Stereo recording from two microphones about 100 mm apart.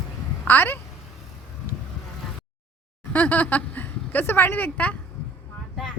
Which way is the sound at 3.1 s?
15° left (ahead or behind).